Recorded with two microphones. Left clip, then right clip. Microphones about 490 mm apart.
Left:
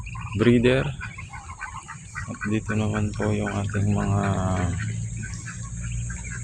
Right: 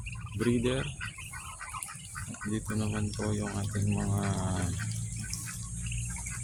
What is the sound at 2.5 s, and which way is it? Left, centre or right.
Speech, right.